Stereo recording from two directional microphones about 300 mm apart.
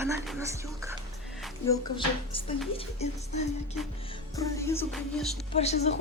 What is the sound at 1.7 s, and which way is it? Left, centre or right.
Speech, centre.